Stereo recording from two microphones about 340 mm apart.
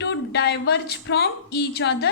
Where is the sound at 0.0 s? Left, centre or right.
Left.